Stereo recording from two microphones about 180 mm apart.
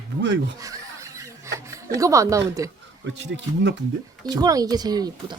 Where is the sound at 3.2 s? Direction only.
80° right.